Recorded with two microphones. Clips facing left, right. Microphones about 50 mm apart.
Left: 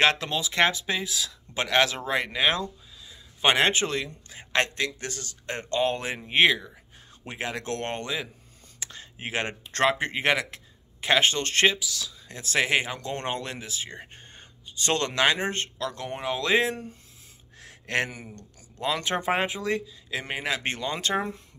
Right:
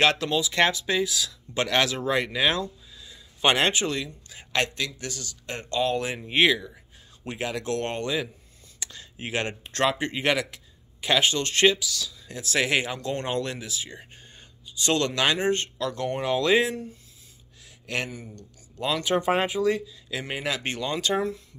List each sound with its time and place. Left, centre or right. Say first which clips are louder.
0.0 s speech: right 1 dB; left
3.1 s a sound: even; centre
3.7 s a man's voice: even; left
6.3 s speech: even; centre
8.7 s a sound: even; left
9.8 s speech: left 1 dB; left
11.6 s speech: right 3 dB; centre
13.7 s speech: even; left
16.1 s speech: right 3 dB; centre
17.6 s a sound: left 3 dB; left
18.3 s speech: right 1 dB; left
19.1 s speech: right 3 dB; centre
20.6 s speech: right 1 dB; left